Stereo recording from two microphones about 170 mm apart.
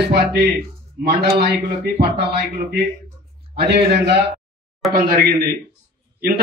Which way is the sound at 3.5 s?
75° right (ahead or behind).